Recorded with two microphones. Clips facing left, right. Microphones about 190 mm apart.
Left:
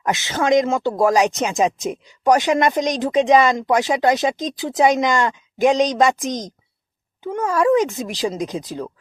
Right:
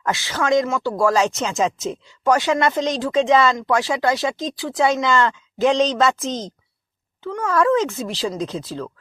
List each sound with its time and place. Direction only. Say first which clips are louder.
0.0 s speech: left 2 dB; 20° left (ahead or behind)